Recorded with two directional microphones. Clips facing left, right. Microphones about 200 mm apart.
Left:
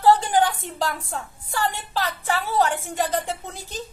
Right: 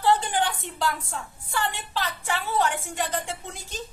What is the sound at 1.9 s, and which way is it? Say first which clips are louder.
Child singing: left 4 dB; 35° left (ahead or behind).